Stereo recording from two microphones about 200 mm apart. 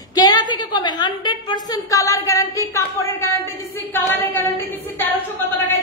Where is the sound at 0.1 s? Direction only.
20° left (ahead or behind).